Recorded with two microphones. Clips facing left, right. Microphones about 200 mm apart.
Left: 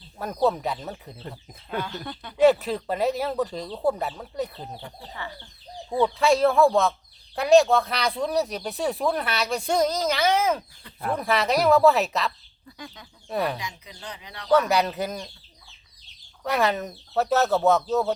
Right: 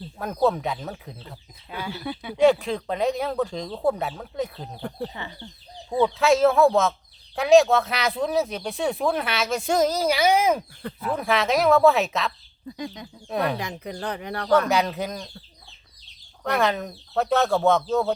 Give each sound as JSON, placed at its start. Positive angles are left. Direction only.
{"t": 0.4, "sound": "speech", "side_deg": 0}
{"t": 2.4, "sound": "speech", "side_deg": 5}
{"t": 5.1, "sound": "speech", "side_deg": -20}
{"t": 6.1, "sound": "speech", "side_deg": 0}
{"t": 11.1, "sound": "speech", "side_deg": 0}
{"t": 12.7, "sound": "speech", "side_deg": -20}
{"t": 13.2, "sound": "speech", "side_deg": 0}
{"t": 13.6, "sound": "speech", "side_deg": -60}
{"t": 14.7, "sound": "speech", "side_deg": 0}
{"t": 16.4, "sound": "speech", "side_deg": 0}